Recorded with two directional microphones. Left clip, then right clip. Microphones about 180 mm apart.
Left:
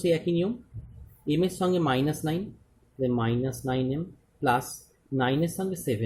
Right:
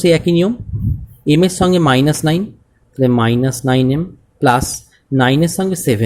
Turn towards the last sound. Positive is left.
turn(degrees=-40)  # may be behind; listen again after turning